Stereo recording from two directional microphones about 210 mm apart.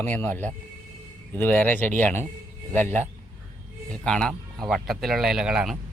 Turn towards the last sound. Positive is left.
turn(degrees=-5)  # may be behind; listen again after turning